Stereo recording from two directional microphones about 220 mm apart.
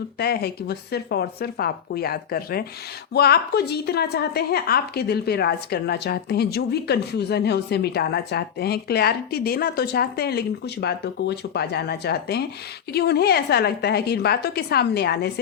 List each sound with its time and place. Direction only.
0.2 s a woman's voice: 45° left (ahead or behind)